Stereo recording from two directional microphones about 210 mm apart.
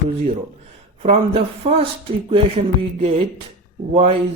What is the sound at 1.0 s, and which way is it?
Speech, 30° right (ahead or behind).